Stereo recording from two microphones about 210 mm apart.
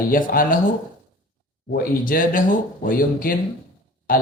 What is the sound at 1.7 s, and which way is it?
Speech, 40° left (ahead or behind).